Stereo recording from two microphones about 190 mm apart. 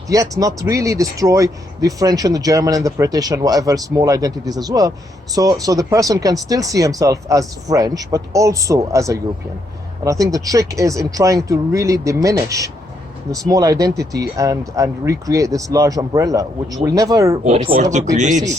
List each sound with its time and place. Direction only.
0.1 s speech: 20° right (ahead or behind)
17.4 s speech: 35° right (ahead or behind)